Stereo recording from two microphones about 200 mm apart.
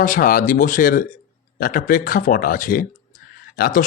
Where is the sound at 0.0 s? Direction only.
45° left (ahead or behind).